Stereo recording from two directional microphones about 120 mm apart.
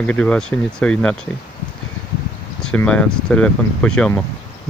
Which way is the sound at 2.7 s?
10° left (ahead or behind).